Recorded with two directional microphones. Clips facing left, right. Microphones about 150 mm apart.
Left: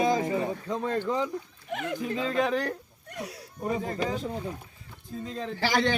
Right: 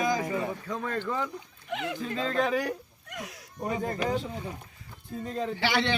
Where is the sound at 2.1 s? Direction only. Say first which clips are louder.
Left 1 dB; 10° left (ahead or behind).